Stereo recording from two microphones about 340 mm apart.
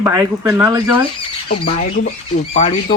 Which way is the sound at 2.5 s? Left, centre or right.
Centre.